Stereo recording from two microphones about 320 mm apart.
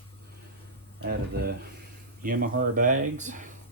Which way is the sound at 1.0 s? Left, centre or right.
Right.